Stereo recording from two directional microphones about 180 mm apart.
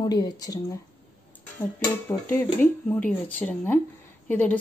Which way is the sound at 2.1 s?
15° left (ahead or behind).